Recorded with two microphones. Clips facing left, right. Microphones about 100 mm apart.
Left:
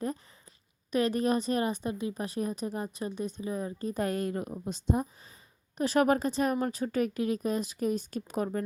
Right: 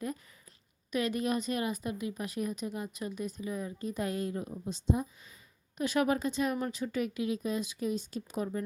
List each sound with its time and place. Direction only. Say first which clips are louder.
0.9 s speech: left 4 dB; 35° left (ahead or behind); by 5.0 s 55° left (ahead or behind)
5.7 s a woman's voice: left 4 dB; 35° left (ahead or behind); by 8.6 s 50° left (ahead or behind)